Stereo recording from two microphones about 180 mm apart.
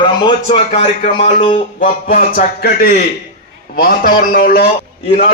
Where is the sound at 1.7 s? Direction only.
50° left (ahead or behind).